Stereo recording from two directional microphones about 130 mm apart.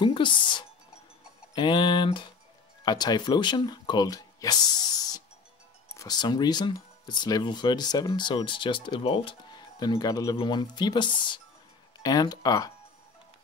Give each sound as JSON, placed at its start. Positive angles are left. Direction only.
{"t": 0.0, "sound": "speech", "side_deg": 40}